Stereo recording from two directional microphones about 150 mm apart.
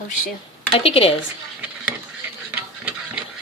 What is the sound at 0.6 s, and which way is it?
Speech, 40° left (ahead or behind).